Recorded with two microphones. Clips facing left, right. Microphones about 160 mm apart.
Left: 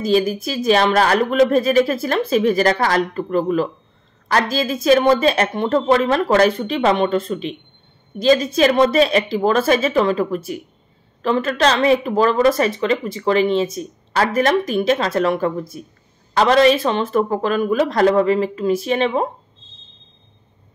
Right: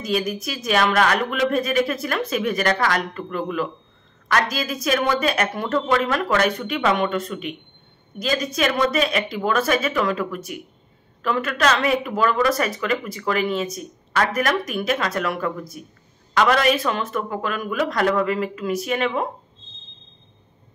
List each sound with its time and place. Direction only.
0.0 s a woman's voice: 30° left (ahead or behind)